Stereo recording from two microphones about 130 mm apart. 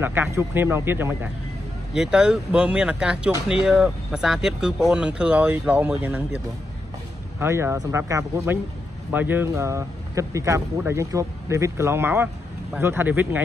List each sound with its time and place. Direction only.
0.0 s a man's voice: 15° right (ahead or behind)
2.0 s a man's voice: 5° right (ahead or behind)
7.3 s a man's voice: 20° right (ahead or behind)